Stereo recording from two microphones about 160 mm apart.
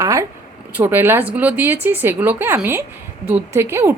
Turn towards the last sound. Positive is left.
turn(degrees=-15)  # may be behind; listen again after turning